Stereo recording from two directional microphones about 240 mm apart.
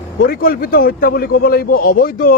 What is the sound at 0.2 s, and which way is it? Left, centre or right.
A man's voice, left.